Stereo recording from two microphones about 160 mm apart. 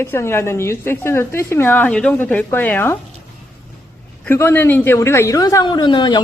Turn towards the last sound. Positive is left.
turn(degrees=30)  # may be behind; listen again after turning